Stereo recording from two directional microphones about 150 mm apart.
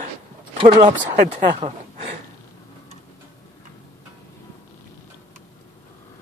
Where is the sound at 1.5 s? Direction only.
45° right (ahead or behind).